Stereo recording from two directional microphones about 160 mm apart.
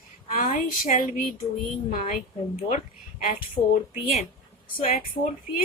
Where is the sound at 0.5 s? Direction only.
55° left (ahead or behind).